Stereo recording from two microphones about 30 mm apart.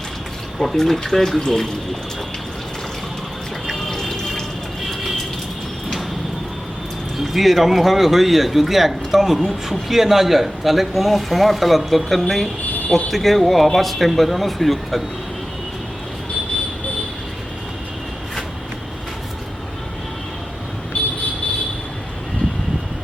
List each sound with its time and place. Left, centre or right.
0.6 s speech: centre
3.7 s water: centre
7.2 s a man's voice: centre